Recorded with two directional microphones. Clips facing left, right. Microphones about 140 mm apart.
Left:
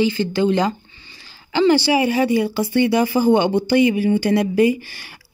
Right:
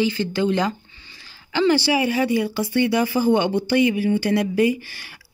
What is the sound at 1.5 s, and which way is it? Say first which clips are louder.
Speech: left 3 dB; 20° left (ahead or behind).